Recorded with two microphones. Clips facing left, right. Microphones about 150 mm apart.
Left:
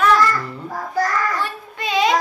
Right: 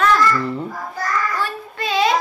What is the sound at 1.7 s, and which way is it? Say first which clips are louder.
Child singing: even; 15° left (ahead or behind).